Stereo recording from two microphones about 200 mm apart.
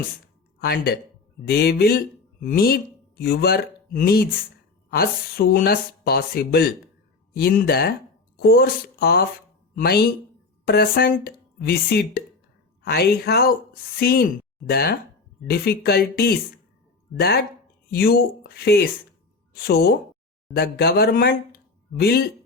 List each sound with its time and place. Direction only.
0.6 s speech: 50° left (ahead or behind)